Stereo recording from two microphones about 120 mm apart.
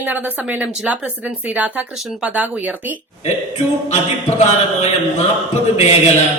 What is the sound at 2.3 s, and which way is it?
Speech, 15° right (ahead or behind).